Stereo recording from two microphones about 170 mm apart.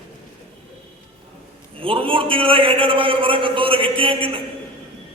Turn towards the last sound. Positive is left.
turn(degrees=-30)  # may be behind; listen again after turning